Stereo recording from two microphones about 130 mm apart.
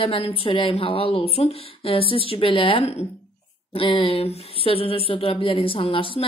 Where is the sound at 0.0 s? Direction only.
45° left (ahead or behind).